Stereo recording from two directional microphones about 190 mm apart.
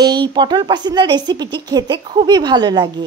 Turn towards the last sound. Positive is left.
turn(degrees=-20)  # may be behind; listen again after turning